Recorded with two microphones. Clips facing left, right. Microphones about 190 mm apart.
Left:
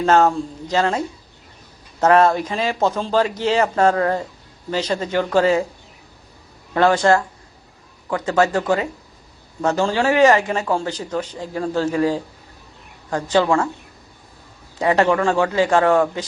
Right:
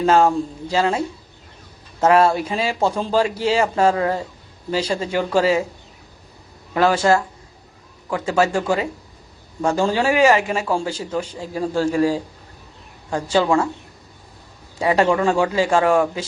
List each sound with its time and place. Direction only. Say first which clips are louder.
0.0 s a man's voice: even; 10° right (ahead or behind)
6.7 s speech: left 1 dB; 5° right (ahead or behind)
8.3 s a man's voice: left 1 dB; 10° right (ahead or behind)
11.8 s a man's voice: right 1 dB; 30° right (ahead or behind)
13.1 s a man's voice: left 1 dB; 10° right (ahead or behind)
14.8 s a man's voice: even; 15° right (ahead or behind)